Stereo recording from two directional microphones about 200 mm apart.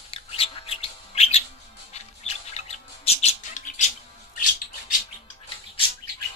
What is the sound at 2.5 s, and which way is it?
Bird, 30° left (ahead or behind).